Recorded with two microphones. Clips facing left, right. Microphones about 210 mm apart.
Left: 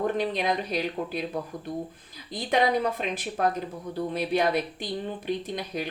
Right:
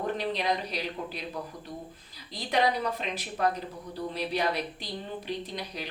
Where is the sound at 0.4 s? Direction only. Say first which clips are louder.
Left 3 dB; 50° left (ahead or behind).